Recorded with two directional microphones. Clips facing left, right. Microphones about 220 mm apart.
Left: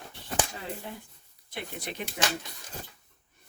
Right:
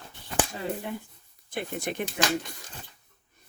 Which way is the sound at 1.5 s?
50° right (ahead or behind).